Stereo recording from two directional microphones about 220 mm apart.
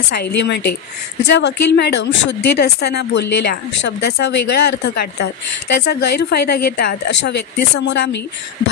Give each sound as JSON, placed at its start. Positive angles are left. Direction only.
{"t": 0.1, "sound": "speech", "side_deg": 45}